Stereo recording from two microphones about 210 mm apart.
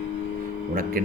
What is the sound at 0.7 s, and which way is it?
Speech, 40° right (ahead or behind).